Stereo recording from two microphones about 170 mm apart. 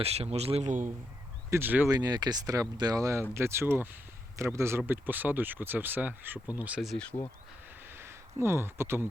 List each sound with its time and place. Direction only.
0.0 s speech: 40° right (ahead or behind)
1.5 s speech: 15° right (ahead or behind)
1.9 s speech: 25° right (ahead or behind); by 6.9 s 5° right (ahead or behind)
7.9 s speech: 15° right (ahead or behind)